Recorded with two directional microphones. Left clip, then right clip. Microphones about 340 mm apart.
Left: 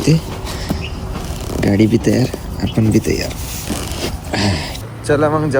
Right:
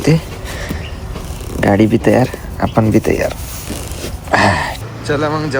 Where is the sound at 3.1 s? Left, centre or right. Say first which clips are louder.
Right 5 dB; centre.